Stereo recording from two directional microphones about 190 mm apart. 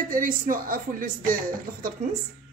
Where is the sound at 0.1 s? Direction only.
45° right (ahead or behind).